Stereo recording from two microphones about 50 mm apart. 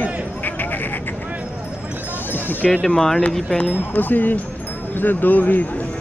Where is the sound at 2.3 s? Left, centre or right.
Left.